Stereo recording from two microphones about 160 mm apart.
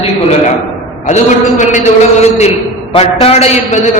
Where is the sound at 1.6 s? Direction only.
50° left (ahead or behind).